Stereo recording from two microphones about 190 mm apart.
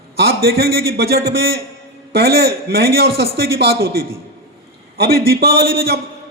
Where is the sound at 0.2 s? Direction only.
55° right (ahead or behind).